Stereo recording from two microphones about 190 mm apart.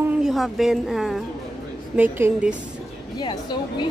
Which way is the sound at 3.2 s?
25° left (ahead or behind).